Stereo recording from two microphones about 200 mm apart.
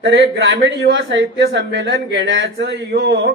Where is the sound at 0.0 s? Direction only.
65° right (ahead or behind).